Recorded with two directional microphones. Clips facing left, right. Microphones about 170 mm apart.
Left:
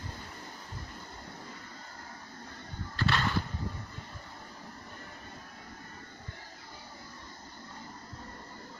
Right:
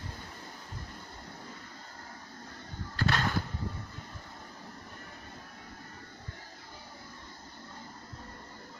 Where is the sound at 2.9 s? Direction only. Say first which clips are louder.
Even; 45° right (ahead or behind).